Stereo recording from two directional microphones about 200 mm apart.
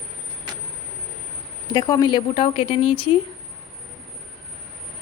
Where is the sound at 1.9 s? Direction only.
20° left (ahead or behind).